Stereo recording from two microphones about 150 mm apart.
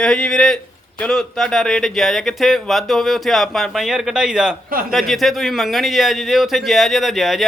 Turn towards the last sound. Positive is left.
turn(degrees=0)  # may be behind; listen again after turning